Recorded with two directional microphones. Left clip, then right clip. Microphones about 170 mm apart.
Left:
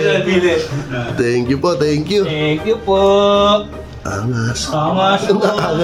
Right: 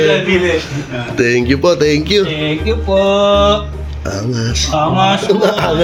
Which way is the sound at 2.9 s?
25° left (ahead or behind).